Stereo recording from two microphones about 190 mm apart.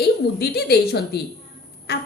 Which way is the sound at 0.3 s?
55° left (ahead or behind).